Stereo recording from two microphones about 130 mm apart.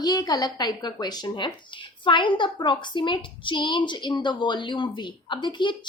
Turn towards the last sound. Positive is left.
turn(degrees=35)  # may be behind; listen again after turning